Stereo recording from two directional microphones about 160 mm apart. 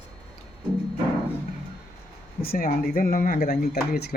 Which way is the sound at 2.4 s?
65° left (ahead or behind).